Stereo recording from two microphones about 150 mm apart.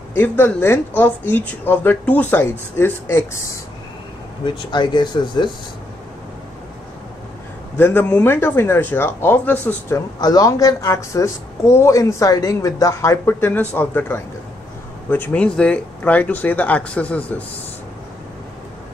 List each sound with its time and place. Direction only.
0.1 s speech: 15° left (ahead or behind)
4.5 s speech: 30° left (ahead or behind)
7.7 s speech: 15° left (ahead or behind)
10.2 s speech: 25° left (ahead or behind); by 17.4 s 10° left (ahead or behind)